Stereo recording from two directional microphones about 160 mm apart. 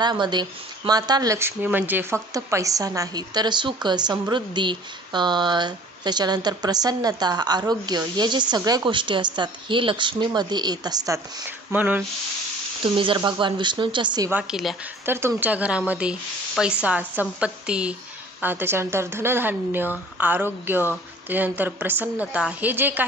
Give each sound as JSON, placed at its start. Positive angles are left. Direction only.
{"t": 0.0, "sound": "speech", "side_deg": -25}
{"t": 11.4, "sound": "speech", "side_deg": -10}
{"t": 12.8, "sound": "speech", "side_deg": -30}
{"t": 14.3, "sound": "a woman's voice", "side_deg": -5}
{"t": 15.0, "sound": "speech", "side_deg": -15}